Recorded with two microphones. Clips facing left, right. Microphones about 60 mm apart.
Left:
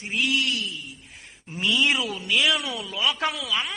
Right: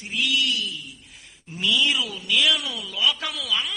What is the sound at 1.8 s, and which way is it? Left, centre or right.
Speech, left.